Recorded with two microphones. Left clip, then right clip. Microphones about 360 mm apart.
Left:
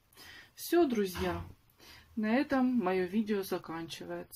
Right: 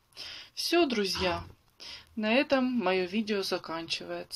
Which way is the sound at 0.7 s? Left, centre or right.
Centre.